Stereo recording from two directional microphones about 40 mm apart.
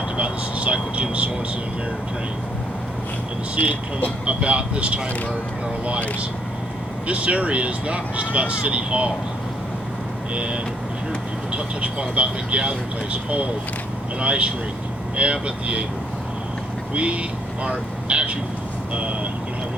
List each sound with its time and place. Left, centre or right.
0.2 s a sound: right
4.3 s speech: right
7.1 s speech: right
10.3 s speech: right
14.2 s speech: right
16.9 s speech: right